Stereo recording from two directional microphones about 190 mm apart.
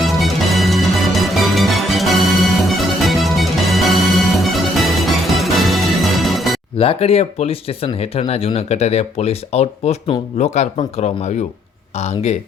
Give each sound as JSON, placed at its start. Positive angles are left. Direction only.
{"t": 0.0, "sound": "music", "side_deg": 0}
{"t": 6.7, "sound": "speech", "side_deg": 30}